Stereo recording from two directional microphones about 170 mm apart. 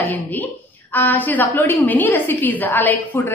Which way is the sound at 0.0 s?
10° left (ahead or behind).